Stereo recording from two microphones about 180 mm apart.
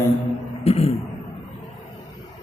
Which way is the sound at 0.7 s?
35° left (ahead or behind).